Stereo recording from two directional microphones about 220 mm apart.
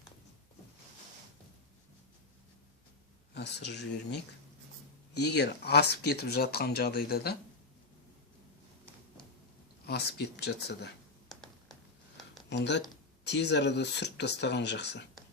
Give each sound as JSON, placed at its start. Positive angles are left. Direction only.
{"t": 3.3, "sound": "speech", "side_deg": 50}
{"t": 9.8, "sound": "speech", "side_deg": 50}
{"t": 11.3, "sound": "a sound", "side_deg": 0}
{"t": 12.5, "sound": "speech", "side_deg": 50}